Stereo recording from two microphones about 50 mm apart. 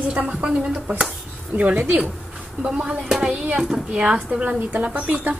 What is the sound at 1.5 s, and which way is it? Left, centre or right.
Speech, right.